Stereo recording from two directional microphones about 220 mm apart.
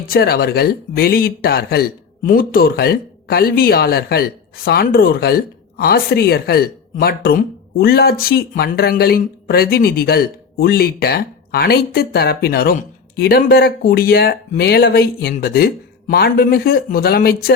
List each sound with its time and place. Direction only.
0.1 s a man's voice: 45° left (ahead or behind)